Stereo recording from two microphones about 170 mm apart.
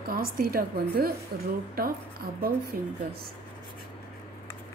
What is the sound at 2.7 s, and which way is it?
Speech, 50° right (ahead or behind).